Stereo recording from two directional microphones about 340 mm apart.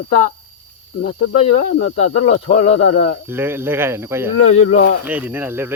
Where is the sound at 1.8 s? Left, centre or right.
Left.